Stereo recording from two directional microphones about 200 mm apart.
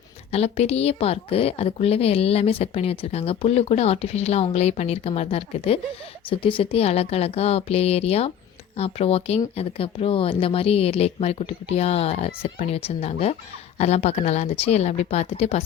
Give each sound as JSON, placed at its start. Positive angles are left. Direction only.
{"t": 0.3, "sound": "a woman's voice", "side_deg": 30}